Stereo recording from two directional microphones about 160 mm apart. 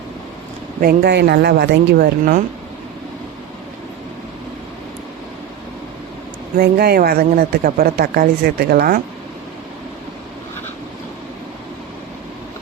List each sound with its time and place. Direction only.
0.8 s speech: 80° right
6.6 s speech: 75° right (ahead or behind)